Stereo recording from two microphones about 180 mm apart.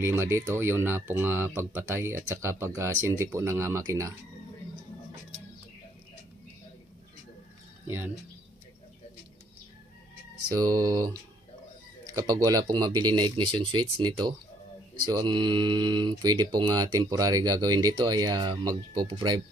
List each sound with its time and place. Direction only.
0.0 s speech: 15° right (ahead or behind)
7.8 s speech: 15° right (ahead or behind)
10.5 s speech: 20° right (ahead or behind)
12.2 s speech: 20° right (ahead or behind)